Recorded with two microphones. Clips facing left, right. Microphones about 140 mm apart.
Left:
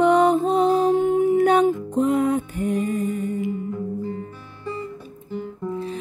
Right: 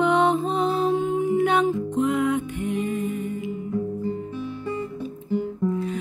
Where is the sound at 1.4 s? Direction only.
40° left (ahead or behind).